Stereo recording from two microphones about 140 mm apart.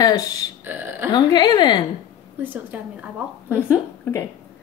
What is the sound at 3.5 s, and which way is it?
Speech, 15° left (ahead or behind).